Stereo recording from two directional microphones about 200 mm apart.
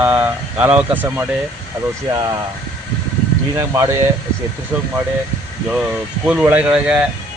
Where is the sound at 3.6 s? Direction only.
10° right (ahead or behind).